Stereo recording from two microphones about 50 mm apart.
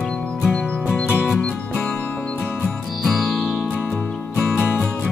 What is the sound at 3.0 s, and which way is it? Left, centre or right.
Music, centre.